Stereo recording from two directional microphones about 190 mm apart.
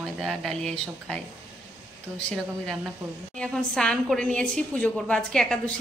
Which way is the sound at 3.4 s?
5° left (ahead or behind).